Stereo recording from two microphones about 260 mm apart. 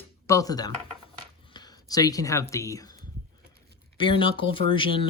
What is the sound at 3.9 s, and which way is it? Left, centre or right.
Speech, centre.